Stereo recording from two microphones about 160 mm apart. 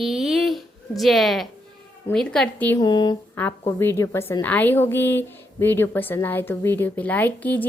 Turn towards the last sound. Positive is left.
turn(degrees=10)  # may be behind; listen again after turning